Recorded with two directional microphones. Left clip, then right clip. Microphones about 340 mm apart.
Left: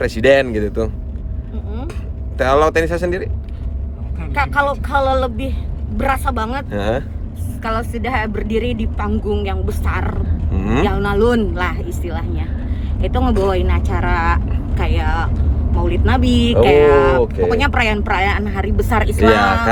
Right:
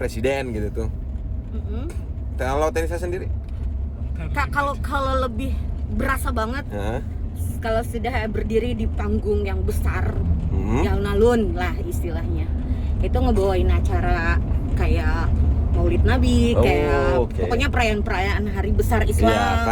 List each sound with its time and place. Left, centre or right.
0.0 s speech: left
2.4 s speech: left
4.4 s speech: centre
6.7 s speech: left
7.6 s speech: centre
10.6 s speech: left
10.8 s speech: centre
19.3 s speech: left